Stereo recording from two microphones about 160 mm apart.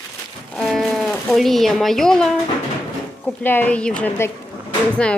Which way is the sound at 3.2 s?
10° left (ahead or behind).